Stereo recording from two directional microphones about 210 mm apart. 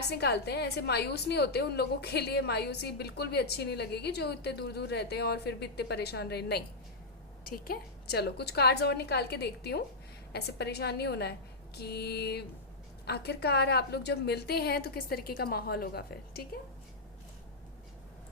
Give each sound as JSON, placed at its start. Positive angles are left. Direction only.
{"t": 0.0, "sound": "a woman's voice", "side_deg": 50}